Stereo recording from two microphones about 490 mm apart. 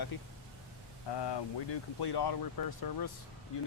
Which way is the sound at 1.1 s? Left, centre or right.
Left.